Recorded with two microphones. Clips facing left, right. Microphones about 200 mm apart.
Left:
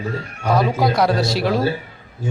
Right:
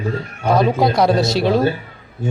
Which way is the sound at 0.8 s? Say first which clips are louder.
Right 3 dB; 25° right (ahead or behind).